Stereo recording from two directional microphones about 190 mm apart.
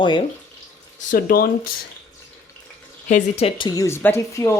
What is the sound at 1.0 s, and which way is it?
Speech, 50° left (ahead or behind).